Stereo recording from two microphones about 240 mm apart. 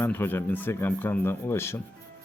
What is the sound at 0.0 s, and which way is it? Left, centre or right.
Speech, centre.